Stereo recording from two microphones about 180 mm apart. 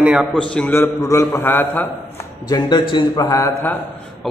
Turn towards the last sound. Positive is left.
turn(degrees=15)  # may be behind; listen again after turning